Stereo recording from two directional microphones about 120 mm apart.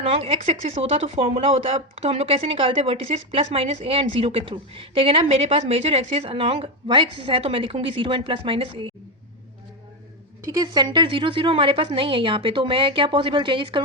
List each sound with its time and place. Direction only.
0.0 s speech: 55° right (ahead or behind)
10.4 s speech: 30° right (ahead or behind)